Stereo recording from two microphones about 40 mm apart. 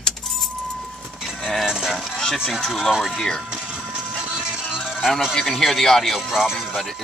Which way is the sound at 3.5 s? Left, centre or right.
Right.